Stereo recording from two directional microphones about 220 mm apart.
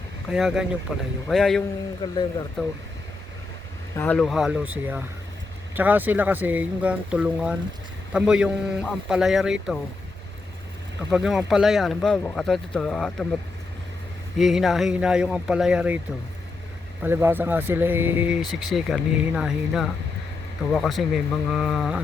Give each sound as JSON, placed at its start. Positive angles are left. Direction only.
{"t": 0.3, "sound": "speech", "side_deg": 0}
{"t": 2.0, "sound": "speech", "side_deg": 20}
{"t": 2.6, "sound": "speech", "side_deg": 0}
{"t": 3.9, "sound": "speech", "side_deg": 10}
{"t": 11.1, "sound": "speech", "side_deg": 0}
{"t": 14.3, "sound": "speech", "side_deg": 0}
{"t": 17.0, "sound": "speech", "side_deg": -10}